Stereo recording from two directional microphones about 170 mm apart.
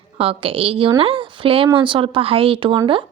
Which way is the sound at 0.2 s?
35° right (ahead or behind).